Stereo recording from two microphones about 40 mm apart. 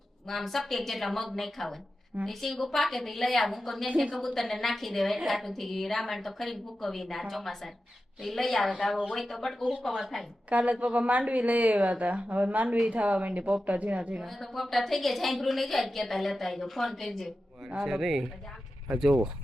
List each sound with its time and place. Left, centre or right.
0.3 s a woman's voice: centre
10.6 s a woman's voice: right
14.3 s a woman's voice: centre
17.7 s speech: centre